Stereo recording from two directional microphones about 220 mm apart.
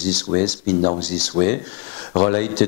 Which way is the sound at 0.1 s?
5° left (ahead or behind).